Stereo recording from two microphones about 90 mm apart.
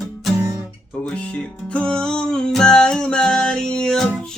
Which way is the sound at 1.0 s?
10° left (ahead or behind).